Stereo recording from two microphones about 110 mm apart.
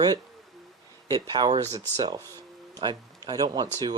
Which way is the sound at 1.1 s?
40° right (ahead or behind).